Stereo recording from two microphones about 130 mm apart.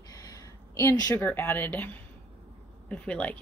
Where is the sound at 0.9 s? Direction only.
25° left (ahead or behind).